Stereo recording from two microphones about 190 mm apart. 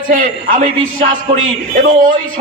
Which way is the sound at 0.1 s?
45° right (ahead or behind).